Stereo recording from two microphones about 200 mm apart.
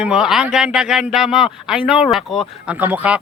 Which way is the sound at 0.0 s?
5° right (ahead or behind).